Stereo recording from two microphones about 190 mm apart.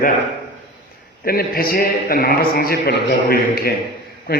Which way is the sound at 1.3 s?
50° left (ahead or behind).